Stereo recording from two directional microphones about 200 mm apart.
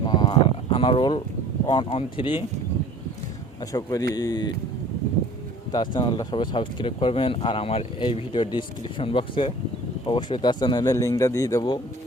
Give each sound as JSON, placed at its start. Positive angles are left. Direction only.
{"t": 0.0, "sound": "a sound", "side_deg": 20}
{"t": 1.6, "sound": "speech", "side_deg": 25}
{"t": 3.7, "sound": "speech", "side_deg": 20}
{"t": 5.7, "sound": "speech", "side_deg": 20}